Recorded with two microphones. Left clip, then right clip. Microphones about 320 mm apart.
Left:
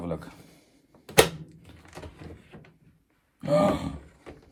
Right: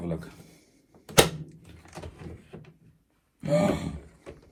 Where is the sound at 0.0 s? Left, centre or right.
Left.